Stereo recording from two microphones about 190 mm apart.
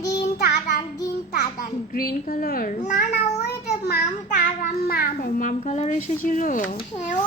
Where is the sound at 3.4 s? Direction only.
55° left (ahead or behind).